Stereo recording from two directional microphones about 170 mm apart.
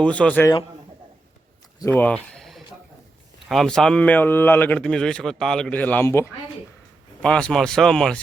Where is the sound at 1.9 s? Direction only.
10° left (ahead or behind).